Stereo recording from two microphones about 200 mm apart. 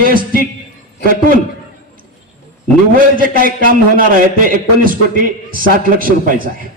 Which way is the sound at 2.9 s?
45° right (ahead or behind).